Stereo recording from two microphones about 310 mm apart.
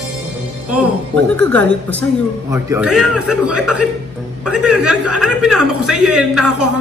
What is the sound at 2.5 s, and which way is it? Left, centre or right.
Speech, centre.